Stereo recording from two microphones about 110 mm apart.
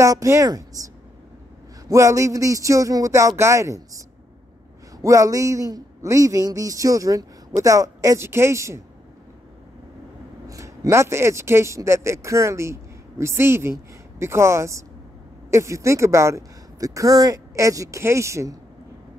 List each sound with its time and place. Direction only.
0.0 s a man's voice: 30° right (ahead or behind)
5.0 s a man's voice: 30° right (ahead or behind)
10.5 s a man's voice: 30° right (ahead or behind)